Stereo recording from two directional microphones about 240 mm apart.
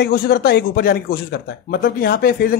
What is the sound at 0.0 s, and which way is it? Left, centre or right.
Speech, left.